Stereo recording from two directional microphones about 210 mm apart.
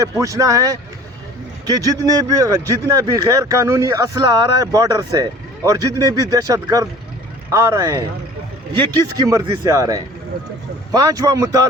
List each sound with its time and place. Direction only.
0.0 s a man's voice: 15° right (ahead or behind)